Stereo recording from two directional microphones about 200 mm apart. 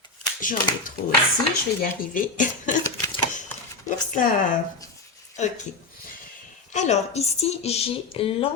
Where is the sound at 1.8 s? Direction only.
40° left (ahead or behind).